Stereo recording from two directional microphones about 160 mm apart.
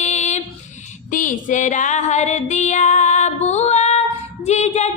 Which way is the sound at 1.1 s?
55° left (ahead or behind).